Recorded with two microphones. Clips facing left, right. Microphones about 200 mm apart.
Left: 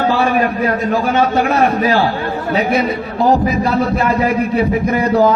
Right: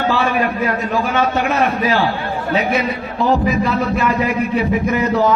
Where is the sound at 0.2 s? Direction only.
40° left (ahead or behind).